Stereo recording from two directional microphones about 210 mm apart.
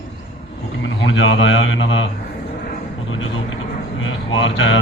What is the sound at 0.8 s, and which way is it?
A man's voice, 65° left (ahead or behind).